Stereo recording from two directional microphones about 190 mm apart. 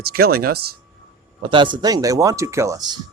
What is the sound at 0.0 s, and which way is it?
Speech, 55° right (ahead or behind).